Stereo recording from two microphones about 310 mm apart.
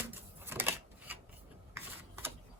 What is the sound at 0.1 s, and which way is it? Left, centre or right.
Typewriter, centre.